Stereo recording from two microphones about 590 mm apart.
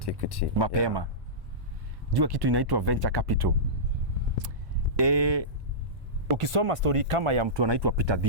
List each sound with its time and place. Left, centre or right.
0.0 s speech: left
0.6 s speech: right
2.1 s speech: right
4.9 s speech: right
6.3 s speech: right